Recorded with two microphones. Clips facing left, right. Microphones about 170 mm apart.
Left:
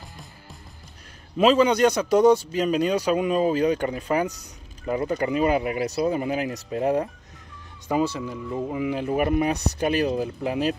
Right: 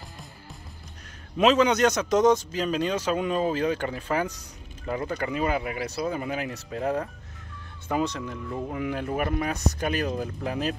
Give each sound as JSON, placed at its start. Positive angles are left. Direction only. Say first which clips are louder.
{"t": 1.4, "sound": "speech", "louder": "left 2 dB", "side_deg": 10}
{"t": 5.2, "sound": "speech", "louder": "left 5 dB", "side_deg": 25}
{"t": 6.7, "sound": "speech", "louder": "left 5 dB", "side_deg": 15}